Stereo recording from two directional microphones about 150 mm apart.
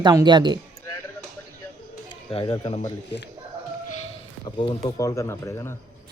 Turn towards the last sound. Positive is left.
turn(degrees=20)  # may be behind; listen again after turning